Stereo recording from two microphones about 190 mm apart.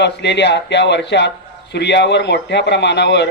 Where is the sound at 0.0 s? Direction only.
65° left (ahead or behind).